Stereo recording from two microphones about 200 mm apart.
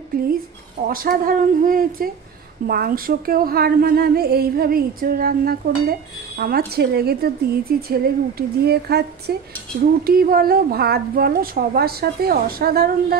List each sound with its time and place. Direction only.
0.1 s speech: 45° right (ahead or behind)